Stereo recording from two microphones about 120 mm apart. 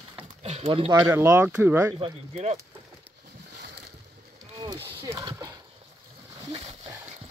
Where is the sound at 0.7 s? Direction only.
45° right (ahead or behind).